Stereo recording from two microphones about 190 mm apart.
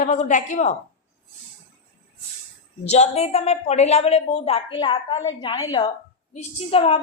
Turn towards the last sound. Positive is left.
turn(degrees=30)  # may be behind; listen again after turning